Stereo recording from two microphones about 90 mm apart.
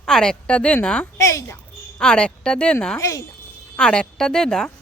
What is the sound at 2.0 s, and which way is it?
Speech, 10° left (ahead or behind).